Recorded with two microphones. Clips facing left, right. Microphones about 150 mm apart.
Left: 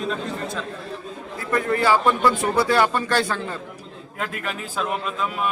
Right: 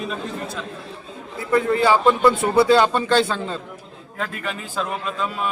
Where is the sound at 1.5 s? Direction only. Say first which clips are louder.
Right 3 dB; 15° right (ahead or behind).